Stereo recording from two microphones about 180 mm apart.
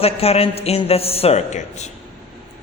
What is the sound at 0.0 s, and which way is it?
A man's voice, 35° left (ahead or behind).